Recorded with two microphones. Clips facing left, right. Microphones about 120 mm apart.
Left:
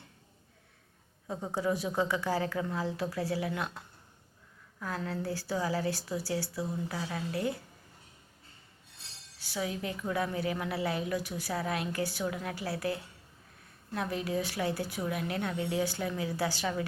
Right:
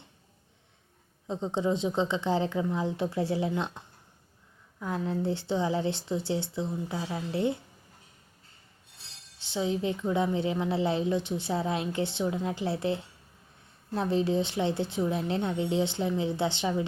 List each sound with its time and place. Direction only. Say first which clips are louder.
1.3 s a woman's voice: right 3 dB; 20° right (ahead or behind)
9.4 s a woman's voice: right 6 dB; 25° right (ahead or behind)